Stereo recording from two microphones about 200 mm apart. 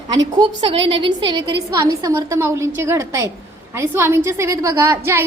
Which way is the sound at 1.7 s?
15° right (ahead or behind).